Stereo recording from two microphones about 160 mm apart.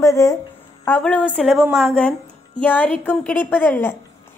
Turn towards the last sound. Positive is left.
turn(degrees=10)  # may be behind; listen again after turning